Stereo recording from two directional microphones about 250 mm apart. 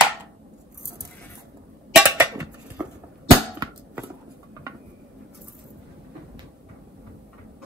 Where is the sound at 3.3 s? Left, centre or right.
Centre.